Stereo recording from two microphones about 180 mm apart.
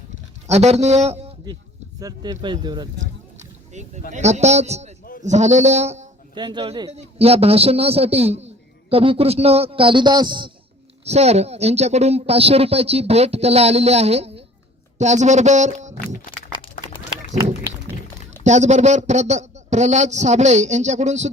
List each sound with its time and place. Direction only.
0.4 s a man's voice: 35° right (ahead or behind)
2.0 s speech: 20° right (ahead or behind)
3.7 s a man's voice: 40° right (ahead or behind)
6.3 s a man's voice: 25° right (ahead or behind)
11.0 s a man's voice: 35° right (ahead or behind)
18.4 s a man's voice: 40° right (ahead or behind)